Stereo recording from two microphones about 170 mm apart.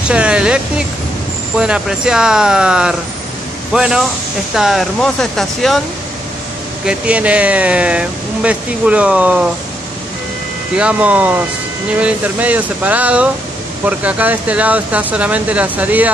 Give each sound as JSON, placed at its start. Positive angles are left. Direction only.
{"t": 0.1, "sound": "a sound", "side_deg": -5}
{"t": 1.6, "sound": "speech", "side_deg": -5}
{"t": 6.9, "sound": "speech", "side_deg": -10}
{"t": 10.8, "sound": "speech", "side_deg": -10}